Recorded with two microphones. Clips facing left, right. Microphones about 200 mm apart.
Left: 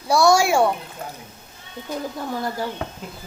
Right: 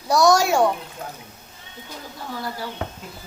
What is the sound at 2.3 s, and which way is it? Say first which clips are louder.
Speech: left 3 dB; 45° left (ahead or behind).